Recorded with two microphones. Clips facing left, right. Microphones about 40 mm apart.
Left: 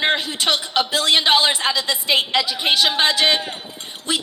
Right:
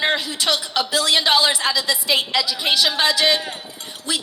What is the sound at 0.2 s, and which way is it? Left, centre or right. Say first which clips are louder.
A woman's voice: left 1 dB; left.